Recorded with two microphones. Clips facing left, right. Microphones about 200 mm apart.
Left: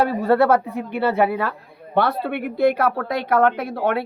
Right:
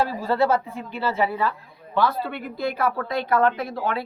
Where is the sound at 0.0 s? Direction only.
60° left (ahead or behind).